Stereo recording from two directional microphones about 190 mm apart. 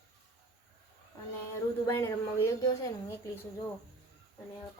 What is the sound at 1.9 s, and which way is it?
A woman's voice, 15° left (ahead or behind).